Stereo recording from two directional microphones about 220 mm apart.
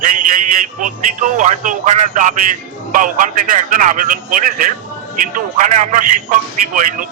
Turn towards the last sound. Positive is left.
turn(degrees=-35)  # may be behind; listen again after turning